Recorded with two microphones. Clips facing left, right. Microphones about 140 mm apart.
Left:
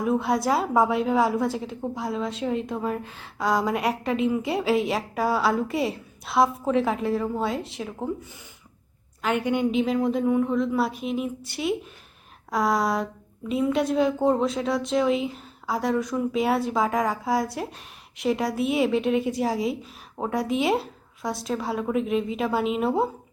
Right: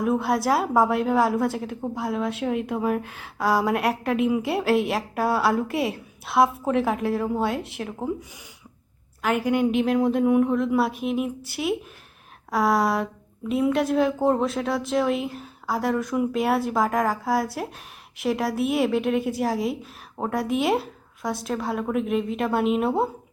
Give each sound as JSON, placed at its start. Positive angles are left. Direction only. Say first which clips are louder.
{"t": 0.0, "sound": "a woman's voice", "louder": "right 1 dB", "side_deg": 0}
{"t": 9.2, "sound": "a woman's voice", "louder": "right 2 dB", "side_deg": 0}